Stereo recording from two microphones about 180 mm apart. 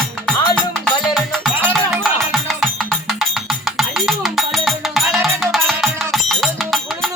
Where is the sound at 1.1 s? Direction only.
Centre (ahead or behind).